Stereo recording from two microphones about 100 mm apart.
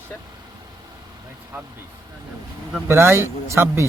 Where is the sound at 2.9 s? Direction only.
25° right (ahead or behind).